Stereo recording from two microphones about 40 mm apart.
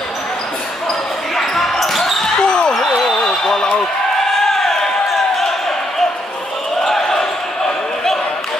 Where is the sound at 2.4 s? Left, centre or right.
Left.